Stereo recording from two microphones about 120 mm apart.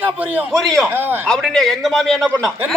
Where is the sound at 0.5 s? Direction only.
5° left (ahead or behind).